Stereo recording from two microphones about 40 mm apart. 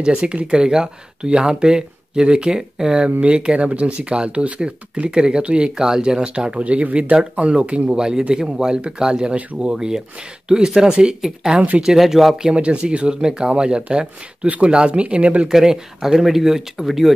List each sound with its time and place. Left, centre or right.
0.0 s speech: right; by 12.4 s centre
12.4 s speech: right
13.1 s speech: centre
15.5 s speech: centre